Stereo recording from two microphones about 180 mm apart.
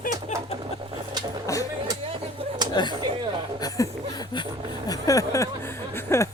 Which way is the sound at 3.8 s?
20° left (ahead or behind).